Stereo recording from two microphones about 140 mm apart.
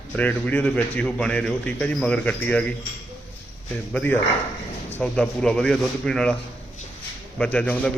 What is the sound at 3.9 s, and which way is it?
A man's voice, 10° left (ahead or behind).